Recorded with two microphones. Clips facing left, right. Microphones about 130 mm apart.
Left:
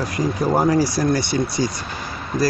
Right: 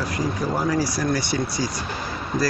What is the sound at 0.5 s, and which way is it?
Speech, 40° left (ahead or behind).